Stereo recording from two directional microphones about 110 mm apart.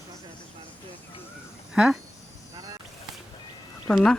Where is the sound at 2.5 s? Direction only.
35° right (ahead or behind).